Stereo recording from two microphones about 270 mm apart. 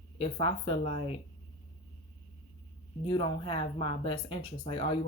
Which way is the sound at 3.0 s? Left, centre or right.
Centre.